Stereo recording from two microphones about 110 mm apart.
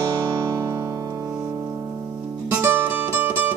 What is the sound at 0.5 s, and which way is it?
Music, 30° right (ahead or behind).